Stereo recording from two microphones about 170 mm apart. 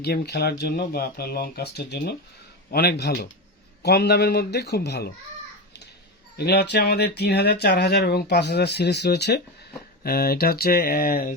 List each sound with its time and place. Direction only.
0.0 s speech: 70° left (ahead or behind)
6.3 s speech: 70° left (ahead or behind)
10.0 s speech: 65° left (ahead or behind)